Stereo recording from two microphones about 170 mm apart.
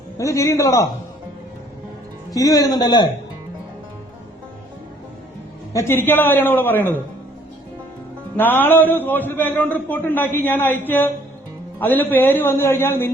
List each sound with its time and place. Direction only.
0.2 s a man's voice: 20° left (ahead or behind)
2.3 s a man's voice: 20° left (ahead or behind)
5.7 s a man's voice: 10° left (ahead or behind)
8.4 s a man's voice: 10° left (ahead or behind)